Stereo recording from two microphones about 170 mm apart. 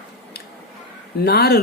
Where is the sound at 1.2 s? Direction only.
65° left (ahead or behind).